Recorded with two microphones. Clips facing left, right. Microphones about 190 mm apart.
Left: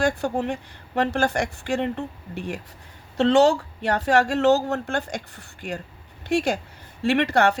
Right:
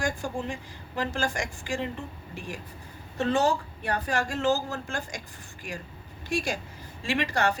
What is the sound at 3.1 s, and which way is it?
A woman's voice, 75° left (ahead or behind).